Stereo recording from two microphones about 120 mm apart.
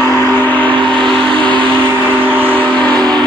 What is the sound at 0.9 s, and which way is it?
Vehicle, 5° left (ahead or behind).